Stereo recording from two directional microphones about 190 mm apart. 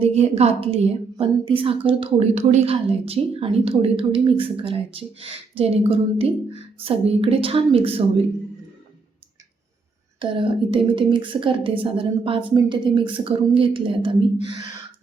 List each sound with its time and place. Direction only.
0.0 s a woman's voice: 35° right (ahead or behind)
10.2 s a woman's voice: 25° right (ahead or behind)